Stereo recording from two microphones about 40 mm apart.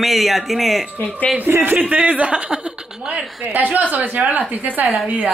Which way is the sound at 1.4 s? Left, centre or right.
Right.